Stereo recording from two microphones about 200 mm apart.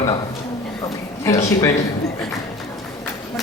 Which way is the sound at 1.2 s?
15° left (ahead or behind).